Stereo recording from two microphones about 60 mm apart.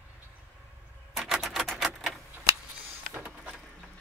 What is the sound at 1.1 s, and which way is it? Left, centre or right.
Typewriter, centre.